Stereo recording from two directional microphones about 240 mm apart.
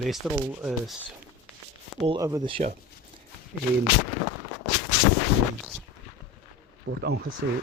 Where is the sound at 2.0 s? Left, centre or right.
Centre.